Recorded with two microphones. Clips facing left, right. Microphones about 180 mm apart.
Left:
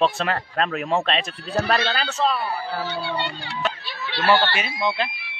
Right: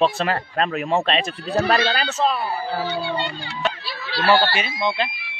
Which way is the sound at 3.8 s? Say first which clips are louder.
Right 1 dB; 35° right (ahead or behind).